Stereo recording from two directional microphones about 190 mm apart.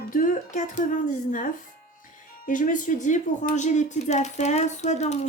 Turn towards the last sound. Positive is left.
turn(degrees=35)  # may be behind; listen again after turning